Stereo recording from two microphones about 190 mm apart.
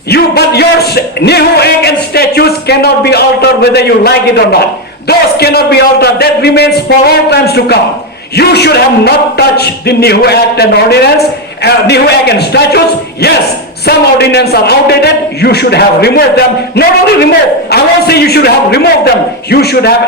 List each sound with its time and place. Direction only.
0.1 s speech: 60° left (ahead or behind)
13.8 s speech: 60° left (ahead or behind)